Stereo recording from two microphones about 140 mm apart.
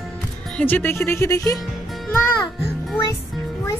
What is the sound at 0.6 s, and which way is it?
Speech, 10° left (ahead or behind).